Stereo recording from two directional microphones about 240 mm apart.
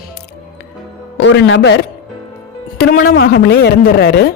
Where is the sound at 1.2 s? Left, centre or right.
Left.